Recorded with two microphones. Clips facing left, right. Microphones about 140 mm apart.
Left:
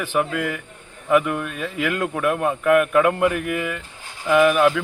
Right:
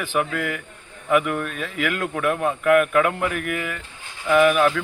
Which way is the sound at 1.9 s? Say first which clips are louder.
Left 1 dB; 15° left (ahead or behind).